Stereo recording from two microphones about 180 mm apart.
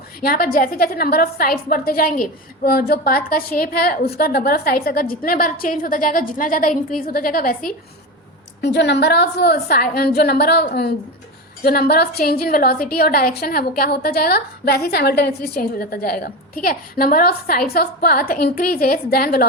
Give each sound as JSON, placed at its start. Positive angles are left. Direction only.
{"t": 0.2, "sound": "a woman's voice", "side_deg": 55}
{"t": 8.6, "sound": "a woman's voice", "side_deg": 70}